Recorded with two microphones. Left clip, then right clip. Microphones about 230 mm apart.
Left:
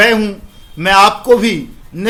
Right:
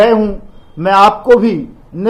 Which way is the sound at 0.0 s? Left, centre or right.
Centre.